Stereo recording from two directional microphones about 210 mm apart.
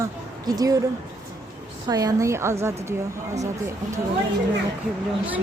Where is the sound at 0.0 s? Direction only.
15° right (ahead or behind).